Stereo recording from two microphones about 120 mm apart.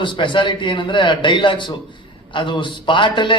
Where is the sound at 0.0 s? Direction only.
45° left (ahead or behind).